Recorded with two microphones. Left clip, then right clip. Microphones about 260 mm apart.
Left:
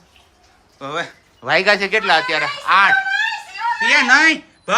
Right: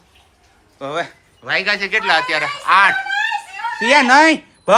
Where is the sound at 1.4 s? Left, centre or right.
Left.